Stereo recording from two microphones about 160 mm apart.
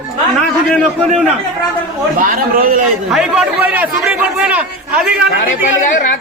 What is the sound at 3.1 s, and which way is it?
A man's voice, 5° right (ahead or behind).